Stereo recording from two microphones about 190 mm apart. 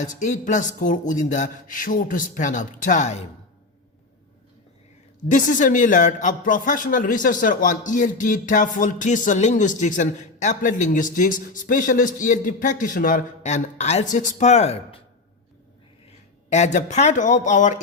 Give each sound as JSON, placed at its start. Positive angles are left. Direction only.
{"t": 0.0, "sound": "a man's voice", "side_deg": 40}
{"t": 5.3, "sound": "a man's voice", "side_deg": 40}
{"t": 16.5, "sound": "a man's voice", "side_deg": 35}